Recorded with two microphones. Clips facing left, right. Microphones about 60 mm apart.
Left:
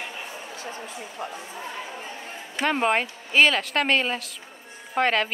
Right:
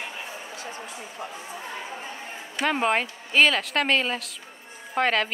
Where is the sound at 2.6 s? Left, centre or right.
Centre.